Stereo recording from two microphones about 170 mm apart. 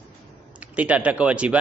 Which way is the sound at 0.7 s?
10° right (ahead or behind).